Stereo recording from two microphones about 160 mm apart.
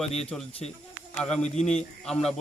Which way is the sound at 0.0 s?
5° left (ahead or behind).